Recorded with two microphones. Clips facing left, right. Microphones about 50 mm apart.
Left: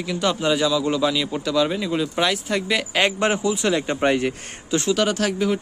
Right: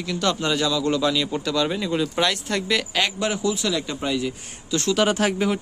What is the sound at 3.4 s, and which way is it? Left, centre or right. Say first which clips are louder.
Speech: left 3 dB; left.